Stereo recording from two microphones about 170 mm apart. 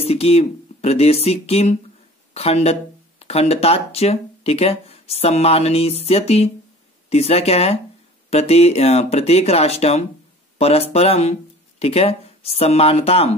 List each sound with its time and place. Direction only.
0.0 s speech: 35° left (ahead or behind)